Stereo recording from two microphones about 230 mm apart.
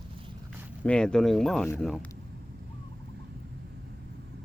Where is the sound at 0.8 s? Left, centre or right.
Centre.